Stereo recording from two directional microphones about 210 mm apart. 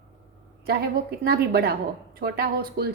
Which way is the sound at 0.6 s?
50° right (ahead or behind).